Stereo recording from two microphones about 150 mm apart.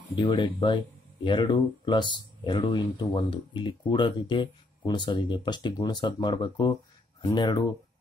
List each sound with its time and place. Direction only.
0.1 s speech: 30° left (ahead or behind)